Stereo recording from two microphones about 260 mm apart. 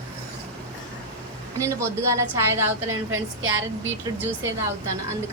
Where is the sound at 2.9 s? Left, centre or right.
Right.